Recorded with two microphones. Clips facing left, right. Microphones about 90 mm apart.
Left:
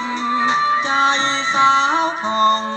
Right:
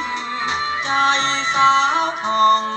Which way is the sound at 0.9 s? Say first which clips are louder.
Left 1 dB; 20° left (ahead or behind).